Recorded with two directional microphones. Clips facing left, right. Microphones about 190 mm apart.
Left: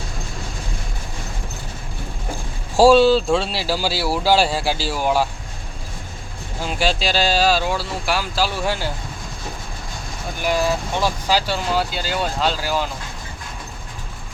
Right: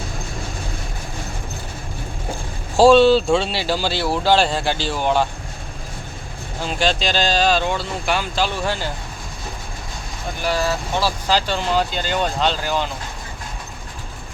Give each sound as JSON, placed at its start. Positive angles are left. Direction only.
{"t": 2.7, "sound": "speech", "side_deg": 5}
{"t": 6.7, "sound": "speech", "side_deg": 5}
{"t": 10.4, "sound": "speech", "side_deg": 15}